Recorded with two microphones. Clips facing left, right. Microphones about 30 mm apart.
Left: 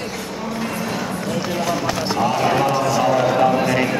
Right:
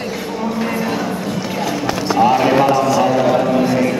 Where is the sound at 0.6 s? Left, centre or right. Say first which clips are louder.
Right 4 dB; centre.